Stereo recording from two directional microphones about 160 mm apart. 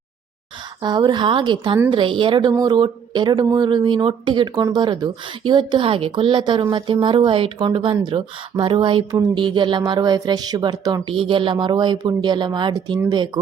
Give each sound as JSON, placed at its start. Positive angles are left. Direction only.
{"t": 0.8, "sound": "a woman's voice", "side_deg": -25}